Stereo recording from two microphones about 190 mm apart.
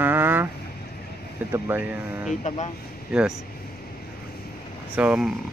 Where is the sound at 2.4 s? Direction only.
35° left (ahead or behind).